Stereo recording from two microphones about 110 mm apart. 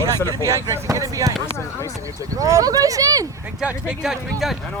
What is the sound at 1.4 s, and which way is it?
Speech, 25° left (ahead or behind).